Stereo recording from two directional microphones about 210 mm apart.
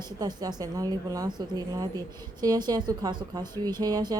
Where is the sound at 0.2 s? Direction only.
20° right (ahead or behind).